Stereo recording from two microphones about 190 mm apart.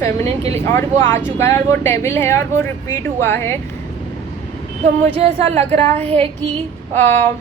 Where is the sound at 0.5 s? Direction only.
10° left (ahead or behind).